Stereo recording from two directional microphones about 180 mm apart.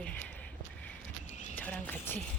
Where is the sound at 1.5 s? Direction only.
10° left (ahead or behind).